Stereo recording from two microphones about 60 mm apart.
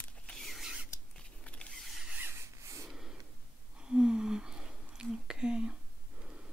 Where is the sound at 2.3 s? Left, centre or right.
Right.